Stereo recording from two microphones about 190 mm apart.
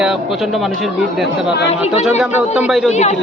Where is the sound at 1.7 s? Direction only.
35° left (ahead or behind).